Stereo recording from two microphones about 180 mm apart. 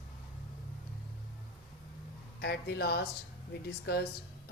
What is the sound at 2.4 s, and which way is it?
A woman's voice, 65° left (ahead or behind).